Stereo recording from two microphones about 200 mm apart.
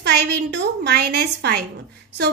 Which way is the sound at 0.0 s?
55° right (ahead or behind).